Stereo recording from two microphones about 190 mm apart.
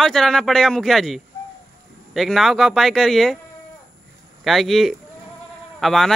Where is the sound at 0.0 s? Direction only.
Centre (ahead or behind).